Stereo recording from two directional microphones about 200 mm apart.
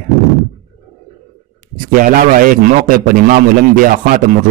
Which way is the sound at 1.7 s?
45° right (ahead or behind).